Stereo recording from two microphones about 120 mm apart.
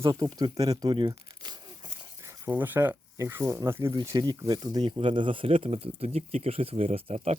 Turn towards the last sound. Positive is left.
turn(degrees=-60)  # may be behind; listen again after turning